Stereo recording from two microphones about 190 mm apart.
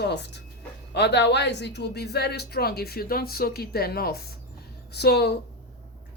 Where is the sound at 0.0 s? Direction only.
60° left (ahead or behind).